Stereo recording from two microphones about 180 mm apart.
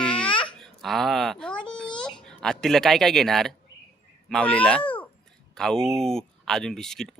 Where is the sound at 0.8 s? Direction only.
Centre (ahead or behind).